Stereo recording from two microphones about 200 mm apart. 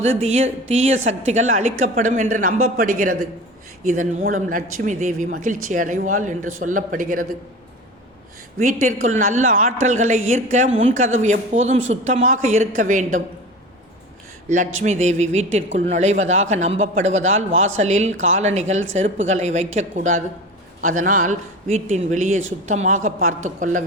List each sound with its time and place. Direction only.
0.2 s a woman's voice: 35° right (ahead or behind)
8.5 s a woman's voice: 40° right (ahead or behind)
14.5 s a woman's voice: 35° right (ahead or behind)